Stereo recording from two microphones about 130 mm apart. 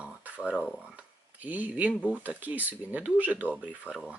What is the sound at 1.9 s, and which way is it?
Speech, 10° left (ahead or behind).